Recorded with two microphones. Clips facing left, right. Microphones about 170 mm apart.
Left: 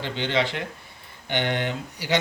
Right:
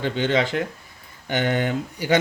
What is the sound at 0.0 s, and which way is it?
Speech, 45° right (ahead or behind).